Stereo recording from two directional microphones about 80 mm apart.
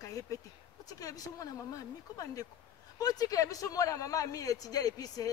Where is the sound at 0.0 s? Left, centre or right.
Left.